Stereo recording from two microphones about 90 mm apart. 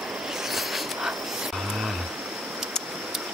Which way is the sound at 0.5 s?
Centre (ahead or behind).